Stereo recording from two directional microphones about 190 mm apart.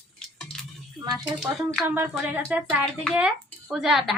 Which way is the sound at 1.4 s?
5° right (ahead or behind).